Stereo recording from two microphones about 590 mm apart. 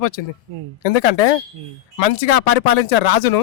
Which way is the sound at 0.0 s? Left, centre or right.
Left.